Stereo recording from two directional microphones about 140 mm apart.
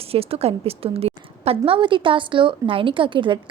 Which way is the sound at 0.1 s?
45° right (ahead or behind).